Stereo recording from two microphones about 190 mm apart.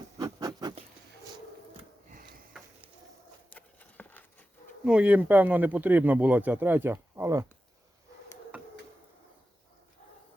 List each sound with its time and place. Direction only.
0.2 s a sound: 20° right (ahead or behind)
2.0 s sniff: 50° right (ahead or behind)
3.5 s patter: 10° left (ahead or behind)
4.9 s speech: 5° right (ahead or behind)